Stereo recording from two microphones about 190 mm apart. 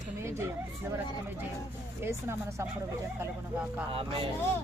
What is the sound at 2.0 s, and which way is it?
Speech, 15° right (ahead or behind).